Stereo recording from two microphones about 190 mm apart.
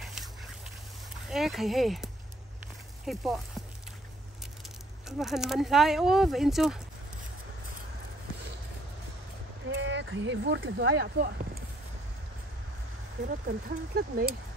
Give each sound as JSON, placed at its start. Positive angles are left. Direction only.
{"t": 0.0, "sound": "a sound", "side_deg": 0}
{"t": 1.2, "sound": "speech", "side_deg": 0}
{"t": 3.1, "sound": "speech", "side_deg": 0}
{"t": 5.0, "sound": "speech", "side_deg": 0}
{"t": 9.7, "sound": "speech", "side_deg": -70}
{"t": 13.3, "sound": "speech", "side_deg": -50}